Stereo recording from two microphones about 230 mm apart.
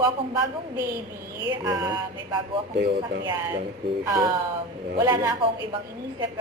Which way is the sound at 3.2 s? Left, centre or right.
Centre.